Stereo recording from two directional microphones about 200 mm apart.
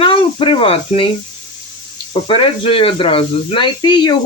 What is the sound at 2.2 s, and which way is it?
Speech, 25° left (ahead or behind).